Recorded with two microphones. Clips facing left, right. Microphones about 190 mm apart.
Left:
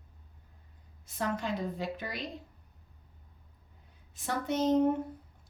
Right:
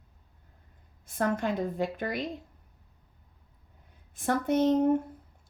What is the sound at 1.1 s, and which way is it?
Speech, 50° right (ahead or behind).